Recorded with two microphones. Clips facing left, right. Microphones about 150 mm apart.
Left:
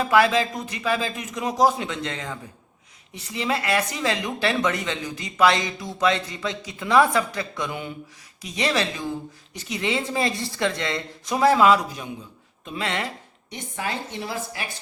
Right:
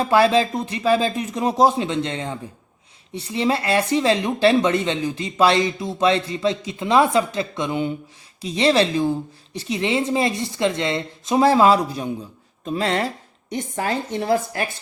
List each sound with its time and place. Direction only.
0.0 s a woman's voice: 30° right (ahead or behind); by 14.7 s 50° right (ahead or behind)